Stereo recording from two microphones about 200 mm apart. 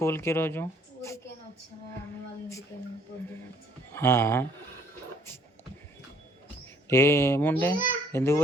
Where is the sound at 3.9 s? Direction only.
10° left (ahead or behind).